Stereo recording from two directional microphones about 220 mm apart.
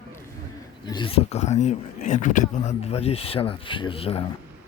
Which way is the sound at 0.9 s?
20° left (ahead or behind).